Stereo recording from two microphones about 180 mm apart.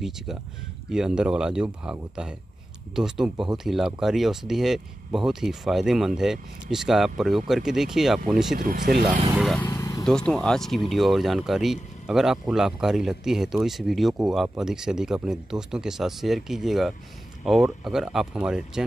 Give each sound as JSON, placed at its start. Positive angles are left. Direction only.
{"t": 0.8, "sound": "speech", "side_deg": -5}
{"t": 8.5, "sound": "speech", "side_deg": -50}
{"t": 9.3, "sound": "speech", "side_deg": 0}
{"t": 9.6, "sound": "vehicle", "side_deg": 15}
{"t": 10.0, "sound": "speech", "side_deg": 5}